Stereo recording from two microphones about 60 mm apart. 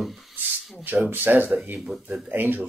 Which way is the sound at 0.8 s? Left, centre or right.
Right.